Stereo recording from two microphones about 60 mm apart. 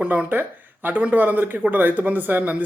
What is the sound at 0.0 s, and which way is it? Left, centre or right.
Speech, right.